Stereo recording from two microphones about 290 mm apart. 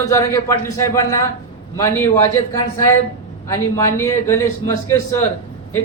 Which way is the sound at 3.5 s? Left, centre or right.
Centre.